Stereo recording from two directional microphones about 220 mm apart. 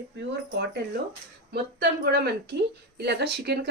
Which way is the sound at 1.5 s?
50° right (ahead or behind).